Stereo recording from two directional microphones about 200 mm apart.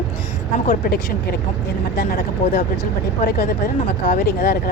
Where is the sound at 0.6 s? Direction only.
45° left (ahead or behind).